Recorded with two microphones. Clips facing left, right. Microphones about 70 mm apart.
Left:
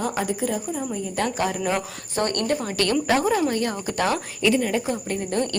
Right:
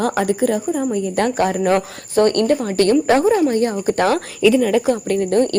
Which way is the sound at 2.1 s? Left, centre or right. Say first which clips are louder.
Right 9 dB; right.